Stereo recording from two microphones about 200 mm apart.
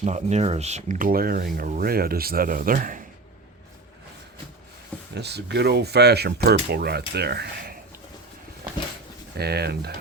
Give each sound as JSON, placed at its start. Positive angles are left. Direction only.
{"t": 0.0, "sound": "speech", "side_deg": -35}
{"t": 5.1, "sound": "speech", "side_deg": -55}
{"t": 9.4, "sound": "speech", "side_deg": -55}